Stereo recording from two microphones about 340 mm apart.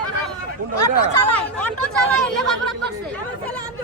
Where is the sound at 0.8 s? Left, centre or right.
Centre.